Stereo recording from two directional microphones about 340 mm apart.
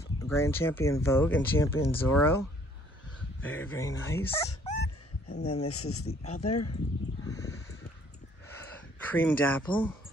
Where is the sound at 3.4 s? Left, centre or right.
Centre.